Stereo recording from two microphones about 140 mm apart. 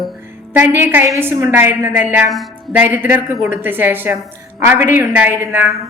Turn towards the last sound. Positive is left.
turn(degrees=-15)  # may be behind; listen again after turning